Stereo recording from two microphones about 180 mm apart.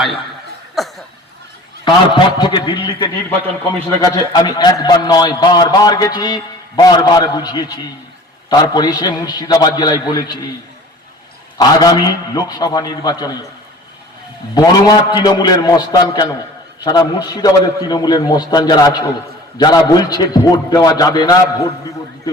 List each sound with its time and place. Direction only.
1.8 s a man's voice: 25° left (ahead or behind)
11.5 s a man's voice: 20° left (ahead or behind)
14.5 s a man's voice: 20° left (ahead or behind)